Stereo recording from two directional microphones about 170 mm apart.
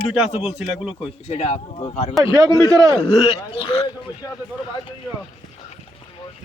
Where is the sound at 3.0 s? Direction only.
30° left (ahead or behind).